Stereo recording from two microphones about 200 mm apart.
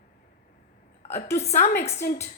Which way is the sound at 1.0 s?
35° left (ahead or behind).